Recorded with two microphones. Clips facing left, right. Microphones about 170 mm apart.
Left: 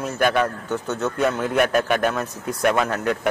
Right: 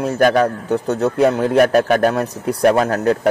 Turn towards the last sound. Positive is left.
turn(degrees=-40)  # may be behind; listen again after turning